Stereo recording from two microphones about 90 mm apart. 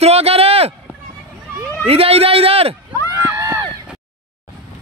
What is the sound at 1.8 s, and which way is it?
Speech, 90° right.